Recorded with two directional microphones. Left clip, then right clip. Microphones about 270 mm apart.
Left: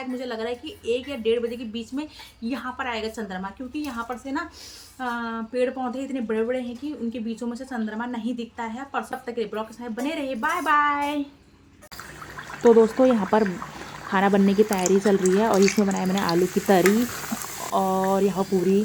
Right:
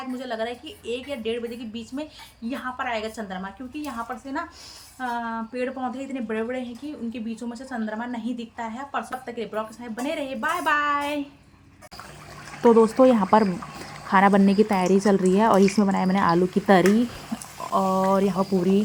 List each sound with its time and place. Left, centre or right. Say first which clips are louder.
0.2 s speech: right 2 dB; centre
12.6 s speech: even; centre